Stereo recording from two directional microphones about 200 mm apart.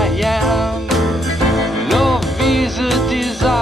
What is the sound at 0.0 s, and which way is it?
Music, centre (ahead or behind).